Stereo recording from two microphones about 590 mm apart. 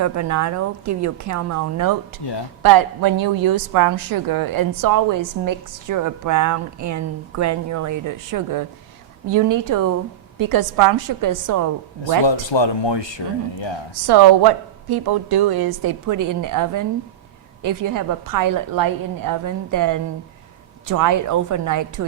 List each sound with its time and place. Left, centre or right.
0.0 s a woman's voice: right
2.2 s speech: left
2.6 s a woman's voice: right
12.2 s speech: left
14.1 s a woman's voice: right